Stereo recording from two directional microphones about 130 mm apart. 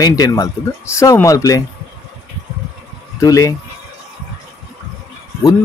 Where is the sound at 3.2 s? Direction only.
25° left (ahead or behind).